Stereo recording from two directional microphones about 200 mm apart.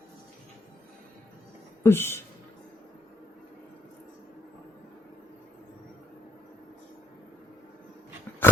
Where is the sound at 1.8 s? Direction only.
10° left (ahead or behind).